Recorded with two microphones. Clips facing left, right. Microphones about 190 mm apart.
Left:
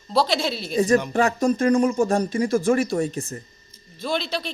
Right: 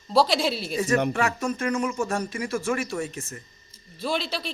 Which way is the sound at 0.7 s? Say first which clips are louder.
Left 7 dB; 35° left (ahead or behind).